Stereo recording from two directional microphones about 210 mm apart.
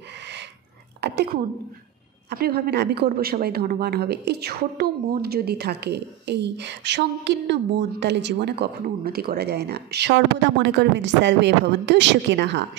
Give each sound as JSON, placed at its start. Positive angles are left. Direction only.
{"t": 1.0, "sound": "a woman's voice", "side_deg": -50}